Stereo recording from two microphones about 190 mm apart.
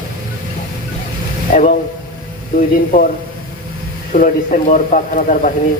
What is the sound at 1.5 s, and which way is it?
A man's voice, 45° left (ahead or behind).